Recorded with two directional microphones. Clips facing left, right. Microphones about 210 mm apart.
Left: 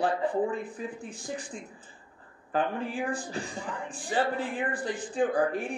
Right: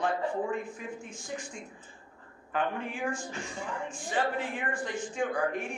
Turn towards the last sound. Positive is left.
turn(degrees=35)  # may be behind; listen again after turning